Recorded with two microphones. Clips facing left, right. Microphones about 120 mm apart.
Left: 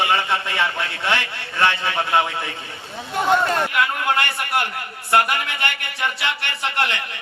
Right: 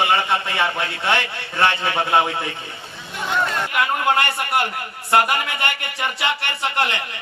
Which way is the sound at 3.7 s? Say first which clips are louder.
Right 2 dB; 25° right (ahead or behind).